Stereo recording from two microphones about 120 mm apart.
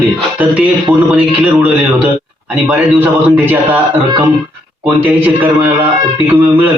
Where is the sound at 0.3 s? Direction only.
10° right (ahead or behind).